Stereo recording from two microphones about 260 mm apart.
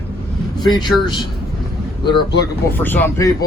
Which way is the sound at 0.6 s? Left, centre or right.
Centre.